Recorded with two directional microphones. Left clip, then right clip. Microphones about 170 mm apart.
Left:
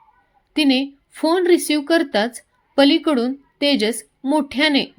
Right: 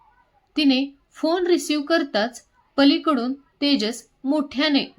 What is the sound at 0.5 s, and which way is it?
A woman's voice, 25° left (ahead or behind).